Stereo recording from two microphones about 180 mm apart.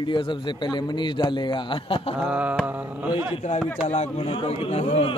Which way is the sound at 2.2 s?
5° right (ahead or behind).